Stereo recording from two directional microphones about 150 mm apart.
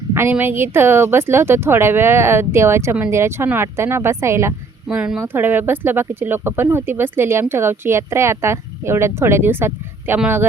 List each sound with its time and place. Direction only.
0.1 s speech: 15° right (ahead or behind)